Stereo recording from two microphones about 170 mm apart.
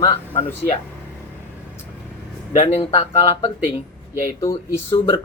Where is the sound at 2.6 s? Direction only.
40° left (ahead or behind).